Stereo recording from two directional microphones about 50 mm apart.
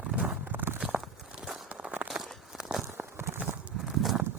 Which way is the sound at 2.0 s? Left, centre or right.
Centre.